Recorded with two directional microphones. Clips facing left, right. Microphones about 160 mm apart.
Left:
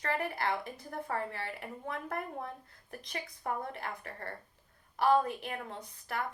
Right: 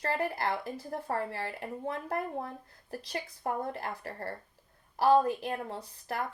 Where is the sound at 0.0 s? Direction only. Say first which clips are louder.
Right 2 dB; 35° right (ahead or behind).